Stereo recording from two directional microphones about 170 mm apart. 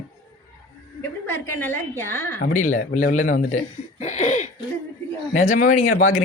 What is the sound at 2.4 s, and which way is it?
Speech, 55° left (ahead or behind).